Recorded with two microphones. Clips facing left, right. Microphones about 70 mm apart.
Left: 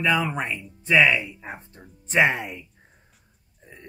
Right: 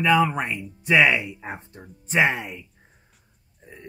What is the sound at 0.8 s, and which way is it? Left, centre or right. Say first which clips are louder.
Speech: right 1 dB; right.